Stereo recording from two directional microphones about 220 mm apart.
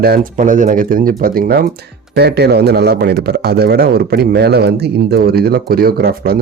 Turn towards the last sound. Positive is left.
turn(degrees=-45)  # may be behind; listen again after turning